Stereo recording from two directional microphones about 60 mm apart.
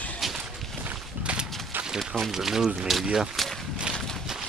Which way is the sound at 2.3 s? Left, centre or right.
Centre.